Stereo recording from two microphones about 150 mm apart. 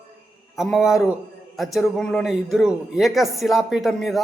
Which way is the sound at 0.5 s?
Centre (ahead or behind).